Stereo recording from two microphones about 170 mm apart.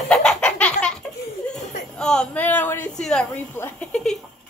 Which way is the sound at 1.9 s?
5° left (ahead or behind).